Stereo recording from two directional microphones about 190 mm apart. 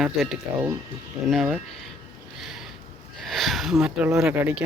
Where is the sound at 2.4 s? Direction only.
Centre (ahead or behind).